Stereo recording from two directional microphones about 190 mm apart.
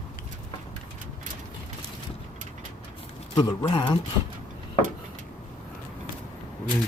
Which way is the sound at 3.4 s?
25° left (ahead or behind).